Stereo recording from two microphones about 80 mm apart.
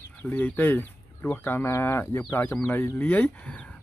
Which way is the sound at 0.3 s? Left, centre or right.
Left.